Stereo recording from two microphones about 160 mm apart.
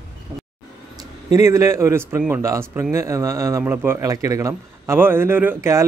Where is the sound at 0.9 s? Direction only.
20° right (ahead or behind).